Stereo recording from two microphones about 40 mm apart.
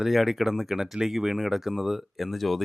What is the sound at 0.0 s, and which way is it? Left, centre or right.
Speech, centre.